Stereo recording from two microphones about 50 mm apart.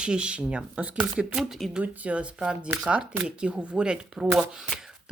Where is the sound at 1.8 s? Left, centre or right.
Right.